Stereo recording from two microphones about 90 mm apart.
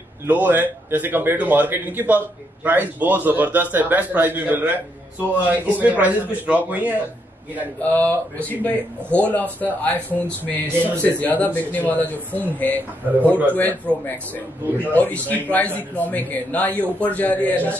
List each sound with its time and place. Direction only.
0.3 s a man's voice: 20° right (ahead or behind)
7.9 s a man's voice: 15° left (ahead or behind)